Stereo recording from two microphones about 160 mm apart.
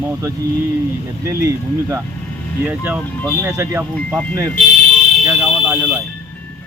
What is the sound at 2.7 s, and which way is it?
Speech, 10° right (ahead or behind).